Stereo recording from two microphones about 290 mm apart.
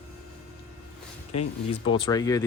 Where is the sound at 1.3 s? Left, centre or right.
Centre.